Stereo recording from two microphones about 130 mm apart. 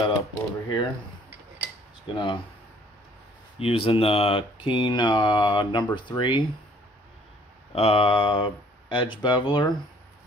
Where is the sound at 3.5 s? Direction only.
45° left (ahead or behind).